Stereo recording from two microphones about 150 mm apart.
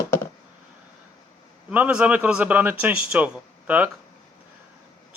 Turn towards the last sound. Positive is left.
turn(degrees=-10)  # may be behind; listen again after turning